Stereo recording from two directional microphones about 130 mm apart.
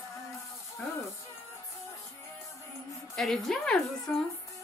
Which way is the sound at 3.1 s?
Centre (ahead or behind).